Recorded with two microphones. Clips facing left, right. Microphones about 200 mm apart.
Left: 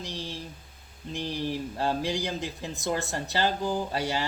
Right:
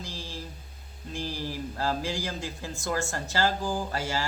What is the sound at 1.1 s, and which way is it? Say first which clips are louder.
Speech: left 3 dB; 20° left (ahead or behind).